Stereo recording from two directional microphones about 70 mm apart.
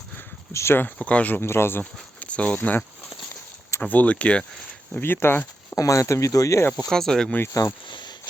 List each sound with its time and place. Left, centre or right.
0.5 s speech: left
1.0 s speech: left
1.5 s speech: left
1.8 s a sound: centre
2.6 s speech: left
4.9 s speech: left
5.7 s speech: left
6.8 s speech: centre
7.9 s a sound: left